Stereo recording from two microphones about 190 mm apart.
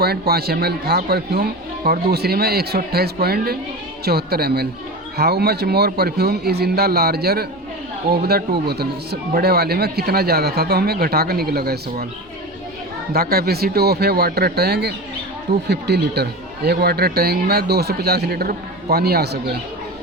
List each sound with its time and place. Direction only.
0.0 s a man's voice: 55° right (ahead or behind)
13.1 s a man's voice: 55° right (ahead or behind)